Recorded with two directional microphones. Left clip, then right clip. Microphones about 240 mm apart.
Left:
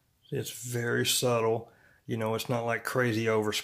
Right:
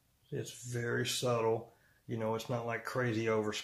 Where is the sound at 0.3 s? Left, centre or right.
Left.